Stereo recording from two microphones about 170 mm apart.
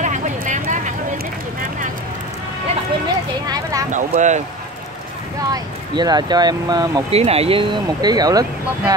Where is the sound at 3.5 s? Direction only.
20° right (ahead or behind).